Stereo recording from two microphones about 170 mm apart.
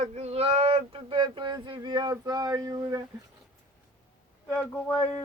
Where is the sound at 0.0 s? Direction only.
40° right (ahead or behind); by 3.0 s 20° right (ahead or behind).